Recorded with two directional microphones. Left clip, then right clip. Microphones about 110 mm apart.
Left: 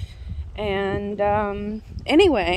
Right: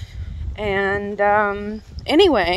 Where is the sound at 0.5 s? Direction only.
15° left (ahead or behind).